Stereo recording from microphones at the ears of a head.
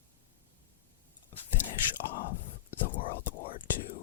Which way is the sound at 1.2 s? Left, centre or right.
Left.